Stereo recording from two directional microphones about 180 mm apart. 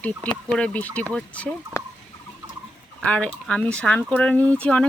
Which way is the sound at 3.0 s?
5° left (ahead or behind).